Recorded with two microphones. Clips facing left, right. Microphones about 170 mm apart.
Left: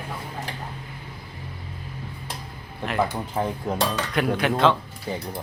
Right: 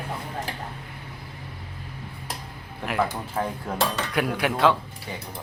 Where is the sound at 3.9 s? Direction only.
10° right (ahead or behind).